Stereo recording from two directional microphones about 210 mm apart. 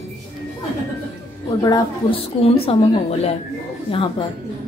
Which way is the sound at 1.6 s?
15° left (ahead or behind).